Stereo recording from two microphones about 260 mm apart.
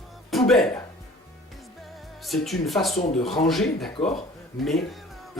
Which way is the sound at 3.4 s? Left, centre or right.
Centre.